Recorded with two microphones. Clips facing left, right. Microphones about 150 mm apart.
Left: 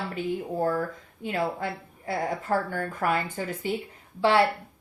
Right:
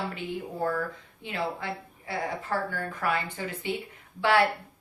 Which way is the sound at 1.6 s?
45° left (ahead or behind).